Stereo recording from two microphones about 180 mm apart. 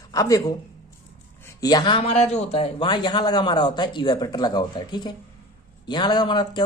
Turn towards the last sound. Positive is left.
turn(degrees=25)  # may be behind; listen again after turning